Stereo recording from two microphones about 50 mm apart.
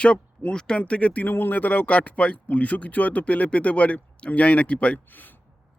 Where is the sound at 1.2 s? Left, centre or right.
Left.